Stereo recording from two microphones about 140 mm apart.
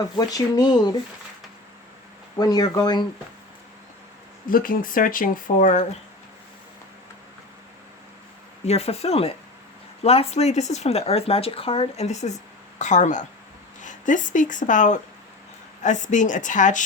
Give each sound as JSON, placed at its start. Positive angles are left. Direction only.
{"t": 0.2, "sound": "speech", "side_deg": 25}
{"t": 2.4, "sound": "speech", "side_deg": 30}
{"t": 4.4, "sound": "speech", "side_deg": 85}
{"t": 8.6, "sound": "speech", "side_deg": 50}